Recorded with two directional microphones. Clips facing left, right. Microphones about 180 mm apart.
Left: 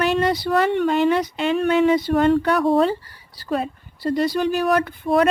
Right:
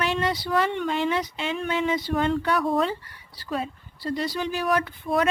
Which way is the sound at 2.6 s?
35° left (ahead or behind).